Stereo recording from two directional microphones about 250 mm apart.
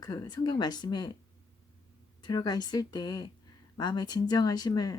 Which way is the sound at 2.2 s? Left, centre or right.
Centre.